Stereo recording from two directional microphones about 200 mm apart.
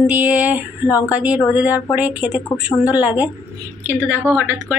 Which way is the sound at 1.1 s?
5° right (ahead or behind).